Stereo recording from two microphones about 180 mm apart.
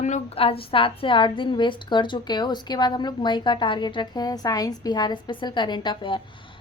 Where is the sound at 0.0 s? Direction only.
35° left (ahead or behind).